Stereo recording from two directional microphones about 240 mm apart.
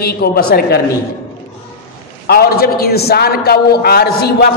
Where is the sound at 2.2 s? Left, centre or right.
Left.